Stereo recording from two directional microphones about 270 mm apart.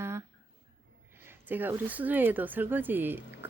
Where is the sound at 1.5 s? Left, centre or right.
Centre.